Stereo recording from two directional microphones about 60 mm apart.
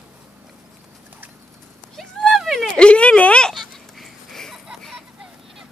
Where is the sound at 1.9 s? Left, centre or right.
Centre.